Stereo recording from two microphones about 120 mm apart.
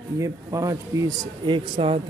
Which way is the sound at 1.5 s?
45° right (ahead or behind).